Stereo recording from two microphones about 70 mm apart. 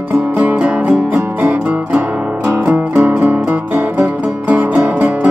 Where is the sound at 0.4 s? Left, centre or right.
Centre.